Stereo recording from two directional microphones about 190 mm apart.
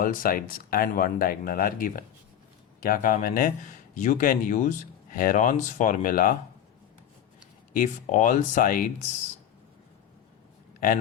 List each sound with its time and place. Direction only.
0.0 s speech: 45° left (ahead or behind)
7.7 s speech: 40° left (ahead or behind)